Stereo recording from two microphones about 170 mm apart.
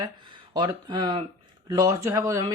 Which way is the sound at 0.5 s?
25° right (ahead or behind).